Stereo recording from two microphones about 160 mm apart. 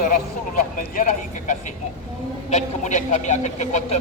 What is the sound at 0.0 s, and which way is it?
Speech, 60° left (ahead or behind).